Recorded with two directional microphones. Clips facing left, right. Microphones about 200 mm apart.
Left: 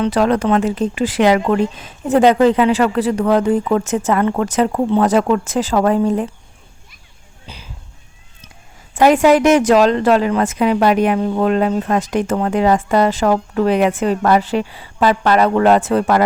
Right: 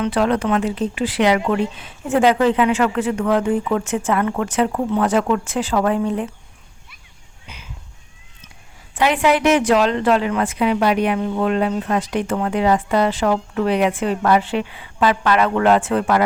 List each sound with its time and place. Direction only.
0.0 s a woman's voice: 40° left (ahead or behind)
7.4 s a sound: 35° left (ahead or behind)
9.0 s a woman's voice: 45° left (ahead or behind)